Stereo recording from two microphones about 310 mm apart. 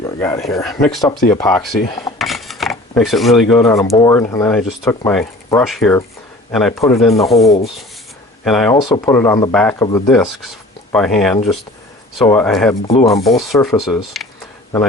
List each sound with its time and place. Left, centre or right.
0.0 s speech: centre
8.7 s speech: centre
12.9 s rub: centre
13.3 s speech: centre